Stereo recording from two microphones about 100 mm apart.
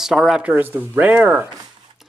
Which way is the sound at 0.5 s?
20° right (ahead or behind).